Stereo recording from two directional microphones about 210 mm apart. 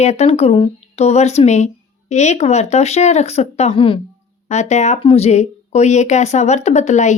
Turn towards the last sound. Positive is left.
turn(degrees=35)  # may be behind; listen again after turning